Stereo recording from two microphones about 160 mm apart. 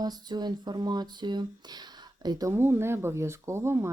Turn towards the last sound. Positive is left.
turn(degrees=-15)  # may be behind; listen again after turning